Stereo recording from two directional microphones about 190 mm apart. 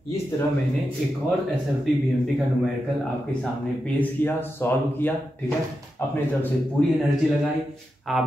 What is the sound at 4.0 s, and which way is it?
Speech, 10° left (ahead or behind).